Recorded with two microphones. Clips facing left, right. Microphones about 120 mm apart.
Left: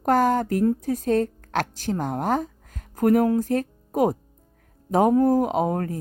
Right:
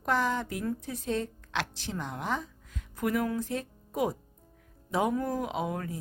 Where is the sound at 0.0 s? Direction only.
45° left (ahead or behind).